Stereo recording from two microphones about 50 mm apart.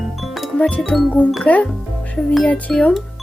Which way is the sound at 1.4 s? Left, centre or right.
Left.